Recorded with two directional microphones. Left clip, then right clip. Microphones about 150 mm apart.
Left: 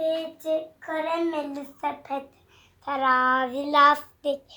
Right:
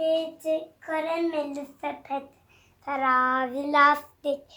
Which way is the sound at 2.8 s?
10° right (ahead or behind).